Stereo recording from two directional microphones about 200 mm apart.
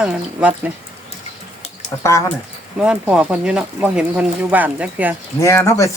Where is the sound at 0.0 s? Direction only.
5° right (ahead or behind).